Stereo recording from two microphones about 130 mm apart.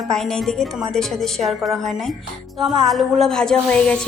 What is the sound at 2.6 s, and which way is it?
Speech, centre (ahead or behind).